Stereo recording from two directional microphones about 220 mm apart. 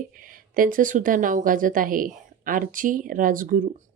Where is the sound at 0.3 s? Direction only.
40° right (ahead or behind).